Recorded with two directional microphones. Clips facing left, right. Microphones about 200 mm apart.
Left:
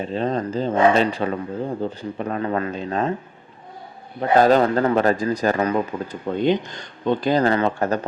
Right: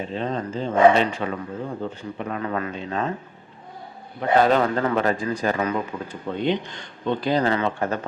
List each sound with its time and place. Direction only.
0.1 s a man's voice: 40° left (ahead or behind)
4.2 s a man's voice: 40° left (ahead or behind)